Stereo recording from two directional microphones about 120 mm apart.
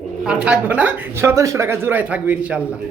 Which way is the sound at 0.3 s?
10° right (ahead or behind).